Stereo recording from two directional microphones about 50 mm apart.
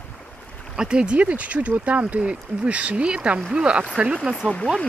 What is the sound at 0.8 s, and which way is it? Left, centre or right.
Speech, centre.